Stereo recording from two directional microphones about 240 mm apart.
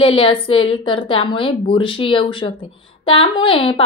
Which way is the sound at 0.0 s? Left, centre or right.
Left.